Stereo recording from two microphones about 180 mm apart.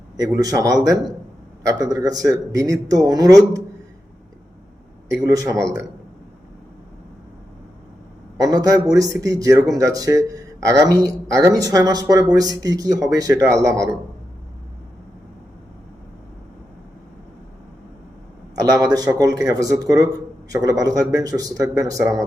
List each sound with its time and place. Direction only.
0.3 s speech: 20° right (ahead or behind)
5.2 s speech: 20° right (ahead or behind)
8.4 s speech: 20° right (ahead or behind)
18.6 s speech: 20° right (ahead or behind)